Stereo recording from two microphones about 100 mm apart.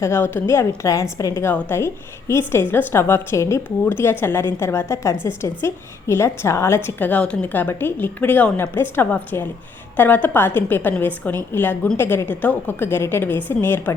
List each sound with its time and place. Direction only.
0.0 s a woman's voice: 25° left (ahead or behind)